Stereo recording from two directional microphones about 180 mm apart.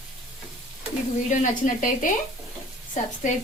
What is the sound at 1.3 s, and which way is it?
A woman's voice, 45° left (ahead or behind).